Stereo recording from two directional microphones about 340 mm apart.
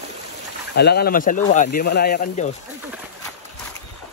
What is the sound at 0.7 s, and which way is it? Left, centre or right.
Speech, left.